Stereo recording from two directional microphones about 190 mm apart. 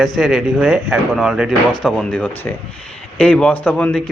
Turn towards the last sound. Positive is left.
turn(degrees=5)  # may be behind; listen again after turning